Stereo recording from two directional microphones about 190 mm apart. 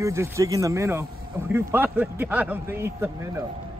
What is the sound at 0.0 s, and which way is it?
A man's voice, 15° right (ahead or behind).